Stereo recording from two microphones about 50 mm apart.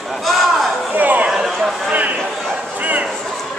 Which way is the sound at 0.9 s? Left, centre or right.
Right.